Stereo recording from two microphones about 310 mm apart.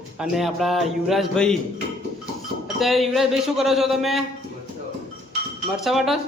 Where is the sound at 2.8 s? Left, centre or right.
Centre.